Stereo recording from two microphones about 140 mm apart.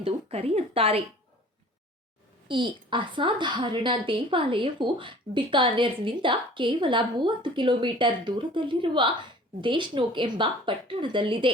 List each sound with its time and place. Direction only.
0.0 s speech: 45° right (ahead or behind)
2.5 s a woman's voice: 35° right (ahead or behind)